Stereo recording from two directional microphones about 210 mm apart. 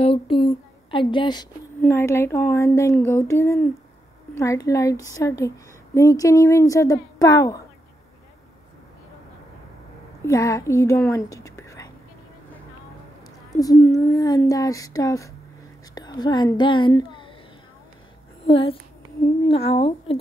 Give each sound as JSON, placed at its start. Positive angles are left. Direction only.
{"t": 0.0, "sound": "speech", "side_deg": 25}
{"t": 10.2, "sound": "speech", "side_deg": 15}
{"t": 11.0, "sound": "whispering", "side_deg": 15}
{"t": 13.6, "sound": "a child's voice", "side_deg": 15}
{"t": 18.5, "sound": "speech", "side_deg": 25}